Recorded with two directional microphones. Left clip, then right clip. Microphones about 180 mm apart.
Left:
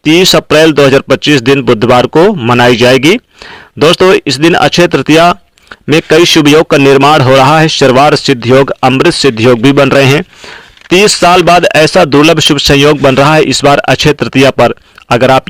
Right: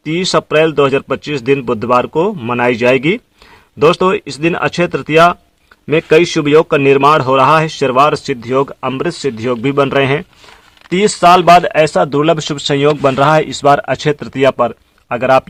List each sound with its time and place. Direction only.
0.0 s speech: 30° left (ahead or behind)